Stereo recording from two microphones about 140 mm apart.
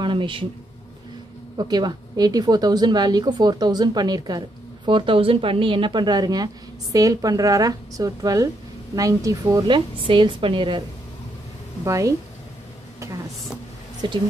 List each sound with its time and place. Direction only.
0.0 s a sound: 35° right (ahead or behind)
1.6 s a woman's voice: 30° right (ahead or behind)
11.8 s a woman's voice: 20° right (ahead or behind)
14.0 s speech: 35° right (ahead or behind)